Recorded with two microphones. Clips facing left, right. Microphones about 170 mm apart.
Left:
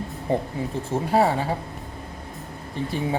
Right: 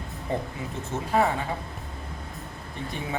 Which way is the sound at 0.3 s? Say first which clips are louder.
Left 6 dB; 30° left (ahead or behind).